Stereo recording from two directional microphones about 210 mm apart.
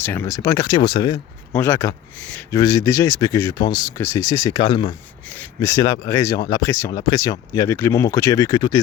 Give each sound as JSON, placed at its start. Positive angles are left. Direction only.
{"t": 0.0, "sound": "speech", "side_deg": 10}
{"t": 5.3, "sound": "speech", "side_deg": 10}